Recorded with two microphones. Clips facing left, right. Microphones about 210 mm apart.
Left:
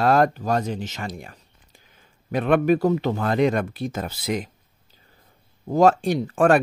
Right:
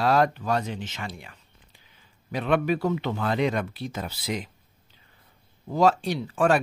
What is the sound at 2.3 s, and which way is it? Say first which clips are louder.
Speech: left 5 dB; 50° left (ahead or behind).